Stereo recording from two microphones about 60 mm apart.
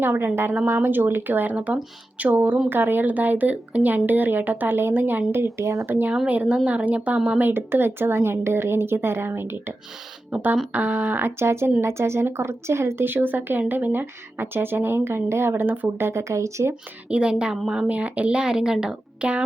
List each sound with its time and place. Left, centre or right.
0.0 s speech: right
2.6 s speech: right
5.4 s speech: right
5.8 s speech: right
6.2 s a woman's voice: right
7.5 s speech: right
10.3 s a woman's voice: right
16.0 s speech: right
17.1 s a woman's voice: centre